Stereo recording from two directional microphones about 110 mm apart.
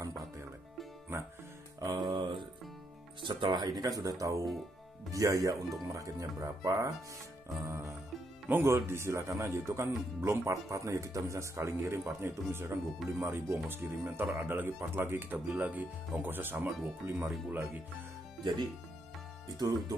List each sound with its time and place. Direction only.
0.0 s music: 30° right (ahead or behind)
1.8 s music: 40° right (ahead or behind)
3.2 s speech: 45° right (ahead or behind); by 17.8 s 15° right (ahead or behind)
18.4 s speech: 40° right (ahead or behind)